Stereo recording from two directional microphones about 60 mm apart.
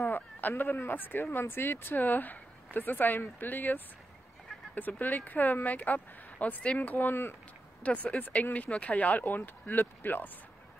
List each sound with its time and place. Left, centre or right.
0.0 s a sound: left
0.7 s speech: left
6.8 s speech: left
7.8 s speech: left